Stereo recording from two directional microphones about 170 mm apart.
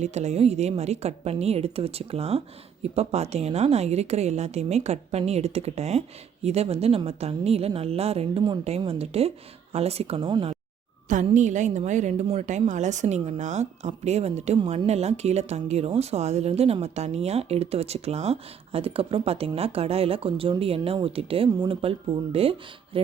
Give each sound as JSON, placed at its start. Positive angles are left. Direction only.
{"t": 0.0, "sound": "a woman's voice", "side_deg": -40}
{"t": 11.1, "sound": "a woman's voice", "side_deg": -45}